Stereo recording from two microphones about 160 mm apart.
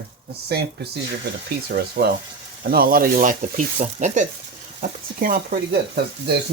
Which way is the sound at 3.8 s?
50° right (ahead or behind).